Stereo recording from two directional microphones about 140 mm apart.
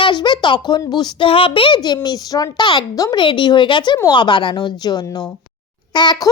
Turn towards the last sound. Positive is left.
turn(degrees=30)  # may be behind; listen again after turning